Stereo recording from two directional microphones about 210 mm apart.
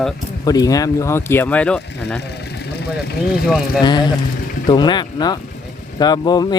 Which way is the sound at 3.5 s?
Centre (ahead or behind).